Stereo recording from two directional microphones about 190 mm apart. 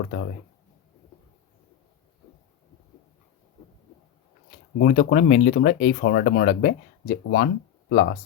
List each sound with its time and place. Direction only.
4.8 s speech: 50° left (ahead or behind)